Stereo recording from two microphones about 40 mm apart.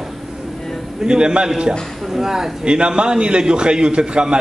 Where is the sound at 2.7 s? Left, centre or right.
Right.